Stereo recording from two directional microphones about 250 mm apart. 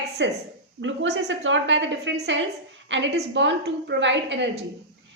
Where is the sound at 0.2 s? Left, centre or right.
Right.